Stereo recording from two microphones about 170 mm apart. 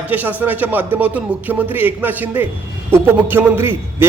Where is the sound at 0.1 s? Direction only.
10° right (ahead or behind).